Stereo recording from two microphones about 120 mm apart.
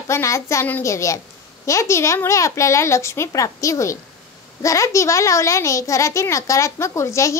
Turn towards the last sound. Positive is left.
turn(degrees=25)  # may be behind; listen again after turning